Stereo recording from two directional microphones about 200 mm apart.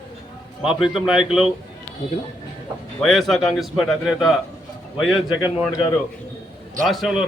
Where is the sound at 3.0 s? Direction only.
Centre (ahead or behind).